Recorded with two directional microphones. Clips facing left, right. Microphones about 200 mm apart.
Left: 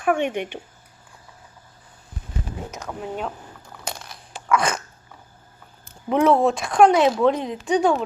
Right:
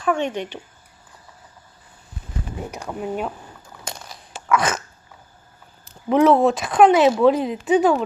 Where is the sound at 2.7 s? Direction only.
10° right (ahead or behind).